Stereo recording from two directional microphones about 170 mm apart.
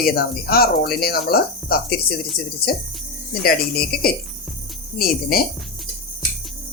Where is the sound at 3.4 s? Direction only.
65° left (ahead or behind).